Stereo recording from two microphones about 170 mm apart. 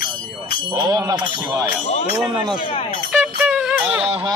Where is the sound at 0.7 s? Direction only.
20° right (ahead or behind).